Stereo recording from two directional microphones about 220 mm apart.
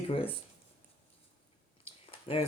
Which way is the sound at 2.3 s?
25° left (ahead or behind).